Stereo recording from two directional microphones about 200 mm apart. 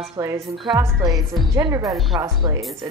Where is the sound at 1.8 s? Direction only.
Centre (ahead or behind).